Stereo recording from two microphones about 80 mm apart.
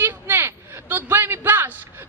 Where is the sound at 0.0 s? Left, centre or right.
Right.